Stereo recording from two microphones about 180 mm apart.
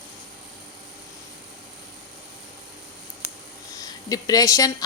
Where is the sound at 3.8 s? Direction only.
20° left (ahead or behind).